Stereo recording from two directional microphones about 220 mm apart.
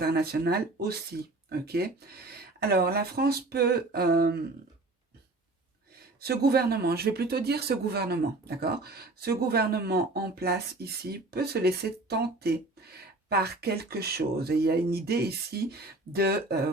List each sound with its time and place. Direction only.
0.0 s speech: 45° right (ahead or behind)
6.1 s speech: 45° right (ahead or behind)